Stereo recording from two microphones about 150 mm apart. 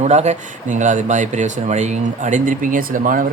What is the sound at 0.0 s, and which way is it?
Speech, 50° right (ahead or behind).